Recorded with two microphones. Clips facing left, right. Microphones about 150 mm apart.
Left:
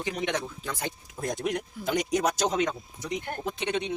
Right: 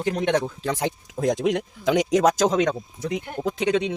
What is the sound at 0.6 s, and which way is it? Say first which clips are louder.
Speech: right 9 dB; 90° right.